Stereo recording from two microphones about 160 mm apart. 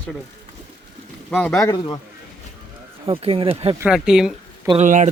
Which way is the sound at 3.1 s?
35° right (ahead or behind).